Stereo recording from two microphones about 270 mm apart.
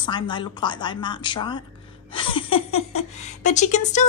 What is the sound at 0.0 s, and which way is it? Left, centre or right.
A woman's voice, centre.